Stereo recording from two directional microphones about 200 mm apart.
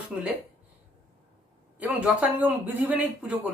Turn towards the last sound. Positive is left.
turn(degrees=-10)  # may be behind; listen again after turning